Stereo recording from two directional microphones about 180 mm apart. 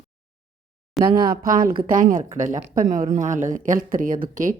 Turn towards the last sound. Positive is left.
turn(degrees=-45)  # may be behind; listen again after turning